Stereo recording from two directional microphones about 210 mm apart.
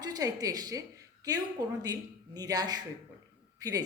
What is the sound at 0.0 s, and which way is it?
A woman's voice, 20° right (ahead or behind).